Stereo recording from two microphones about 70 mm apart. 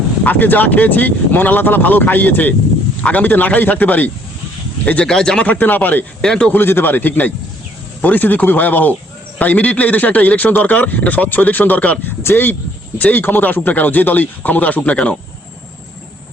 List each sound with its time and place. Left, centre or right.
0.3 s speech: left
5.0 s speech: centre
5.5 s speech: left
6.2 s speech: centre
6.5 s speech: left